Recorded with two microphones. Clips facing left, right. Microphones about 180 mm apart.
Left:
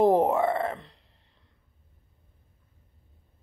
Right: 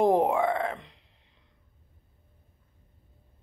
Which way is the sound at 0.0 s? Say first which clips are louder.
Left 2 dB; 5° left (ahead or behind).